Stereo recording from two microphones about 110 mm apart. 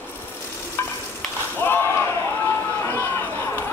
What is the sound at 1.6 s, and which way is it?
Slam, 20° left (ahead or behind).